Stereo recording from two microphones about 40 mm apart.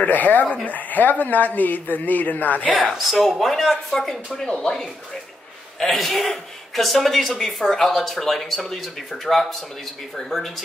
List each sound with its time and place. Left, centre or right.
0.0 s speech: left
3.1 s a man's voice: centre